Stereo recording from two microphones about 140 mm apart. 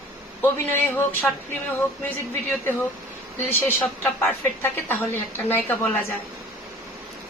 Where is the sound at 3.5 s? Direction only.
15° left (ahead or behind).